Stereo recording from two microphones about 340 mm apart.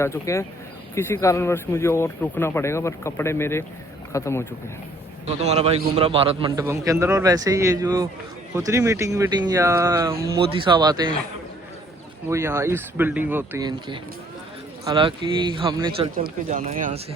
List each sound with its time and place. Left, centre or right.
0.0 s speech: centre
5.2 s a man's voice: centre
12.3 s a man's voice: centre
15.9 s speech: right